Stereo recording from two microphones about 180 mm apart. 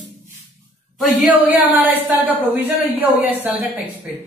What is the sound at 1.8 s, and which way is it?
A woman's voice, 10° right (ahead or behind).